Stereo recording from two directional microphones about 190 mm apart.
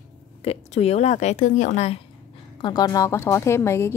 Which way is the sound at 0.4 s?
35° left (ahead or behind).